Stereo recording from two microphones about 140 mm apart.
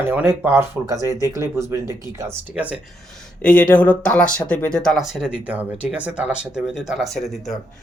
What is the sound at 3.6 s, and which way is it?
Speech, 10° left (ahead or behind).